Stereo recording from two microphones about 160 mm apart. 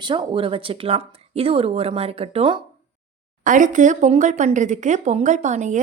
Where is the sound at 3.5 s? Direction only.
55° right (ahead or behind).